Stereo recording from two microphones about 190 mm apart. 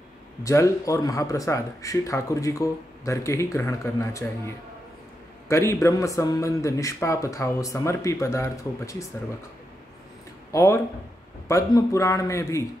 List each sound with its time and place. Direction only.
0.4 s speech: 15° left (ahead or behind)
10.5 s speech: 15° left (ahead or behind)